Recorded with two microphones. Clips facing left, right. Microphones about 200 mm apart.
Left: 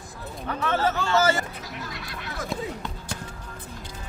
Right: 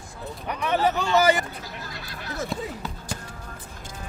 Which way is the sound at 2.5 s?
5° right (ahead or behind).